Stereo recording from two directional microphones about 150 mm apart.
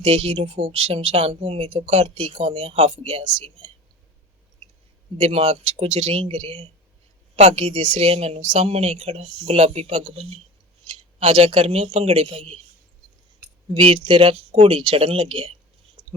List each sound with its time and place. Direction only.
0.0 s speech: 40° right (ahead or behind)
5.1 s speech: 45° right (ahead or behind)
13.7 s speech: 35° right (ahead or behind)